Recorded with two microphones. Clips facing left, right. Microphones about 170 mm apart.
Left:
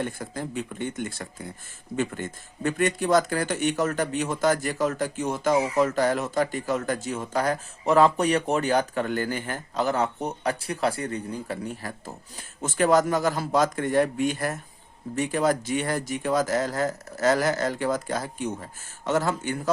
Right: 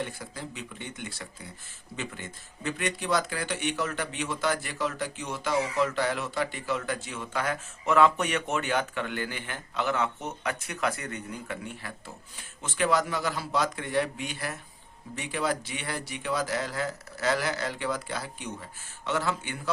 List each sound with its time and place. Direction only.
0.0 s speech: 50° left (ahead or behind)